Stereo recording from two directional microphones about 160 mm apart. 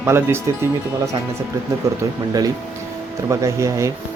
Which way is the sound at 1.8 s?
20° right (ahead or behind).